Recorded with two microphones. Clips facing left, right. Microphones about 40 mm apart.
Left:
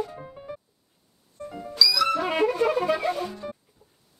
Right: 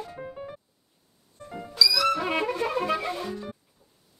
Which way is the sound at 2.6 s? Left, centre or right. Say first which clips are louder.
Left 4 dB; centre.